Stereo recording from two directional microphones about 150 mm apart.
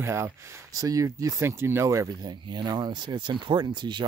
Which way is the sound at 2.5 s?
30° right (ahead or behind).